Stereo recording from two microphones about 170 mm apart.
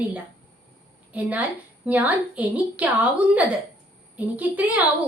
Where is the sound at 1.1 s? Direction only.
10° right (ahead or behind).